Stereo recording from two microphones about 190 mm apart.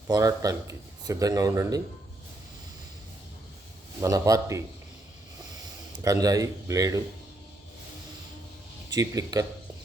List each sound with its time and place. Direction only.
0.1 s a man's voice: 20° right (ahead or behind)
4.0 s speech: 15° right (ahead or behind)
6.0 s speech: 20° right (ahead or behind)
8.9 s a man's voice: 20° right (ahead or behind)